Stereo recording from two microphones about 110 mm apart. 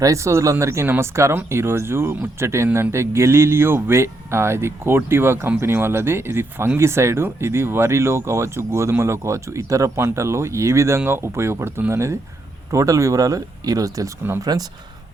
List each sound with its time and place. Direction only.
0.0 s speech: 30° right (ahead or behind)